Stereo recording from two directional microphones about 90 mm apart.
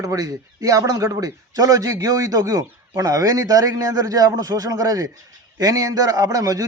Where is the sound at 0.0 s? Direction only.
40° right (ahead or behind).